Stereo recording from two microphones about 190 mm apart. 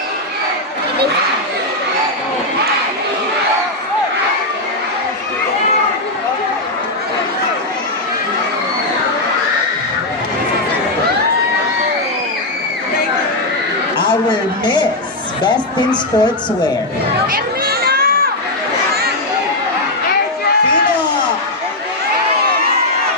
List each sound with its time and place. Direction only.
14.6 s a sound: 20° left (ahead or behind)
15.4 s speech: 25° left (ahead or behind)
17.3 s crowd: 50° right (ahead or behind)